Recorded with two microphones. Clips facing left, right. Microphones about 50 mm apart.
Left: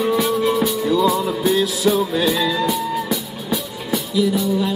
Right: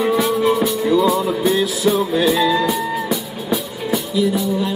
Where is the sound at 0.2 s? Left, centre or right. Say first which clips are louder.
Right 2 dB; centre.